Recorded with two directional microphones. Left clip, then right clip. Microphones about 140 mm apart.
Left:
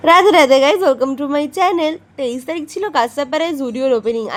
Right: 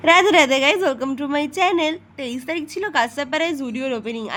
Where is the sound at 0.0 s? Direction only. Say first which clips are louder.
Left 4 dB; 45° left (ahead or behind).